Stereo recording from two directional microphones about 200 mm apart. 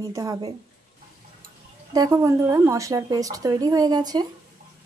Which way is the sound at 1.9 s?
15° right (ahead or behind).